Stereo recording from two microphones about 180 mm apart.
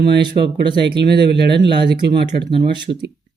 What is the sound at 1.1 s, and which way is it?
Speech, 65° right (ahead or behind).